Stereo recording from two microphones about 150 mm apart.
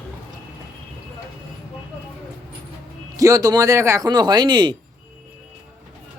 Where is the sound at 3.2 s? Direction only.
20° right (ahead or behind).